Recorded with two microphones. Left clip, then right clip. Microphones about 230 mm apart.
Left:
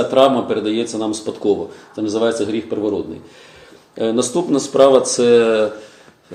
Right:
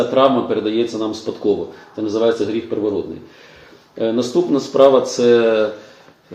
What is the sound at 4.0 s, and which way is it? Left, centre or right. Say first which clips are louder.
Speech: even; left.